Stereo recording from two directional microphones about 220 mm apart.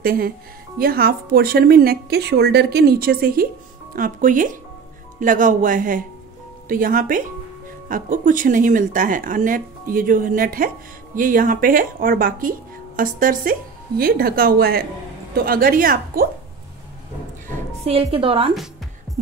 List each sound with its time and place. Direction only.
0.0 s speech: 40° right (ahead or behind)
17.8 s a woman's voice: 25° right (ahead or behind)